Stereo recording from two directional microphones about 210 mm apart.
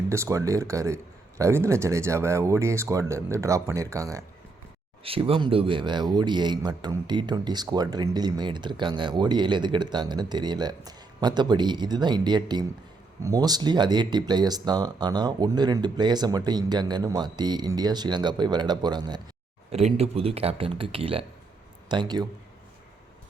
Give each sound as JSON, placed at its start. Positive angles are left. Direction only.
{"t": 0.1, "sound": "speech", "side_deg": -15}
{"t": 5.0, "sound": "speech", "side_deg": -25}